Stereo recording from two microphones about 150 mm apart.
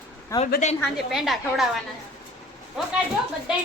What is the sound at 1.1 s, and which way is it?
Speech, centre (ahead or behind).